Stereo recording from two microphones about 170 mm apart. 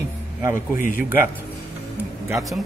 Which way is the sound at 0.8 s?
55° left (ahead or behind).